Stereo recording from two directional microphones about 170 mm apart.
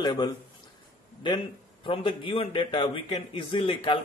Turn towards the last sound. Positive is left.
turn(degrees=30)  # may be behind; listen again after turning